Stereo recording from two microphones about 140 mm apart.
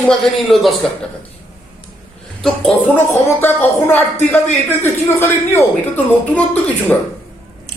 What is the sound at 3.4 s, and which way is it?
Speech, 15° left (ahead or behind).